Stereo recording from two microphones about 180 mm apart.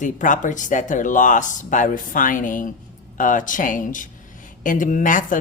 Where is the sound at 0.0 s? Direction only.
45° left (ahead or behind).